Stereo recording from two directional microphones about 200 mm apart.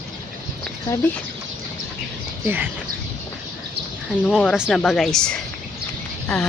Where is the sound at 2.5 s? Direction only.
10° right (ahead or behind).